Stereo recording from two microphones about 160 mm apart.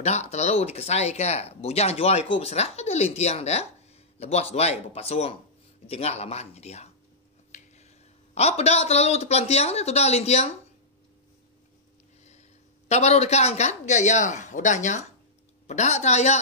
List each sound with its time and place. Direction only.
0.0 s speech: 45° left (ahead or behind)
7.5 s a sound: 45° left (ahead or behind)
8.4 s speech: 40° left (ahead or behind)
12.3 s a woman's voice: 45° left (ahead or behind)